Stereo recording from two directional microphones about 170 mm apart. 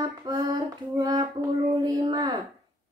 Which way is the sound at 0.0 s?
25° right (ahead or behind).